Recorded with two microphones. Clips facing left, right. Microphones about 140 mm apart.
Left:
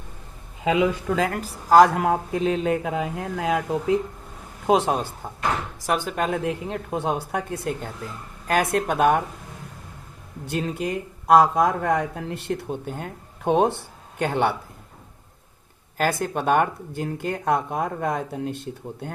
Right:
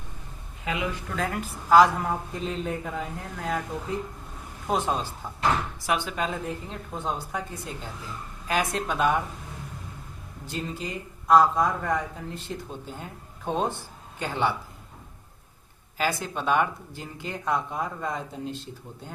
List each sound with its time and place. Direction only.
1.3 s speech: 40° left (ahead or behind)
2.0 s speech: 80° left
4.6 s speech: 70° left (ahead or behind)
5.8 s speech: 45° left (ahead or behind)
10.5 s speech: 65° left (ahead or behind)
16.0 s speech: 50° left (ahead or behind)